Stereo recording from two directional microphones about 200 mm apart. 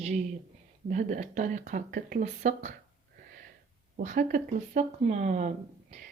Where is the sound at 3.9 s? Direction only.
40° right (ahead or behind).